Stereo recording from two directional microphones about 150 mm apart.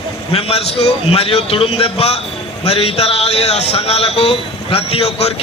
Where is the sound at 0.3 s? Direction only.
40° left (ahead or behind).